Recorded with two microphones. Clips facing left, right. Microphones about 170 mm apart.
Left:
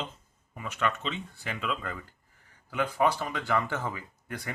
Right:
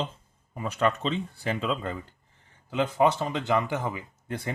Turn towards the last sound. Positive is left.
turn(degrees=-25)  # may be behind; listen again after turning